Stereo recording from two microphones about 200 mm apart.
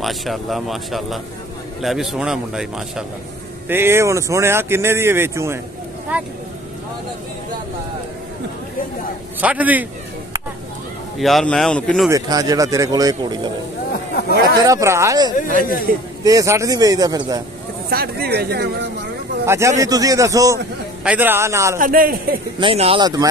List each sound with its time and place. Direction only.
0.0 s a man's voice: centre (ahead or behind)
9.4 s speech: 5° right (ahead or behind)
11.1 s a man's voice: centre (ahead or behind)
12.1 s speech: 15° right (ahead or behind)
14.6 s speech: 15° right (ahead or behind)
15.9 s speech: 45° right (ahead or behind)
16.3 s speech: 15° right (ahead or behind)
17.8 s speech: 50° right (ahead or behind)
19.4 s a man's voice: 15° right (ahead or behind)
21.7 s speech: 45° right (ahead or behind)
22.6 s speech: 25° right (ahead or behind)